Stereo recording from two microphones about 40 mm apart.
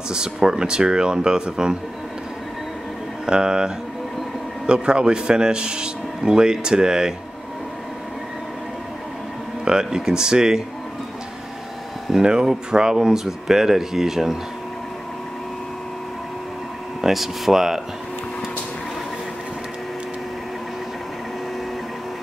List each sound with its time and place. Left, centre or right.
0.1 s a man's voice: centre
3.3 s a man's voice: centre
9.7 s speech: centre
12.2 s speech: centre
17.0 s speech: centre